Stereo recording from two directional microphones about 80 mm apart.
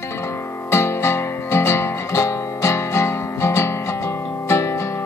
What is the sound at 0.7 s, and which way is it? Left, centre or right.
Music, left.